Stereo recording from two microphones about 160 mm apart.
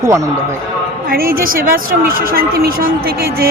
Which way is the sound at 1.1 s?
65° right (ahead or behind).